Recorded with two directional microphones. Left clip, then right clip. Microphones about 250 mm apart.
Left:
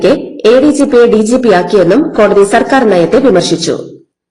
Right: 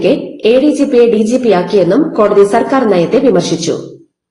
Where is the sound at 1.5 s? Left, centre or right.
Left.